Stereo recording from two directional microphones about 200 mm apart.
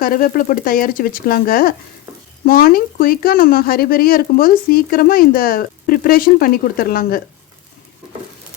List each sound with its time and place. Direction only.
0.0 s speech: 45° left (ahead or behind)